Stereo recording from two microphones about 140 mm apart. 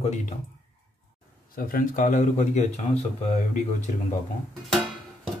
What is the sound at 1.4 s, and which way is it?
Speech, 90° left.